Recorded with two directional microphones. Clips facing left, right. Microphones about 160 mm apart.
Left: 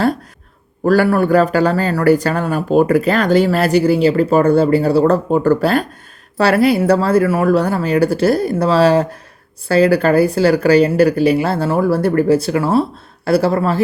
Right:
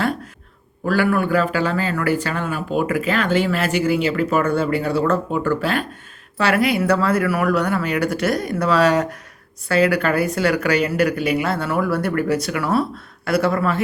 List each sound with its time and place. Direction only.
0.9 s speech: 40° left (ahead or behind)